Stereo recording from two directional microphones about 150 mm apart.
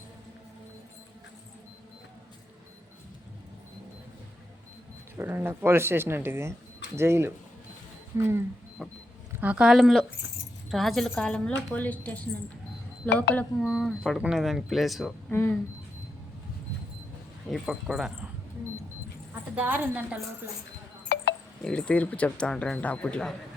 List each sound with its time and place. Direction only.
5.1 s speech: 15° right (ahead or behind)
8.8 s speech: centre (ahead or behind)
15.3 s speech: 15° left (ahead or behind)
17.5 s speech: centre (ahead or behind)
19.3 s a woman's voice: 10° right (ahead or behind)
21.6 s speech: 5° left (ahead or behind)